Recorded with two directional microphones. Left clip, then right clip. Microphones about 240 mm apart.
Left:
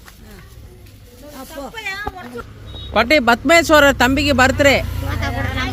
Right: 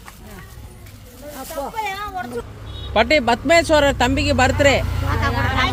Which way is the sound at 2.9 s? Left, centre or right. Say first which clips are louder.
Left 2 dB; left.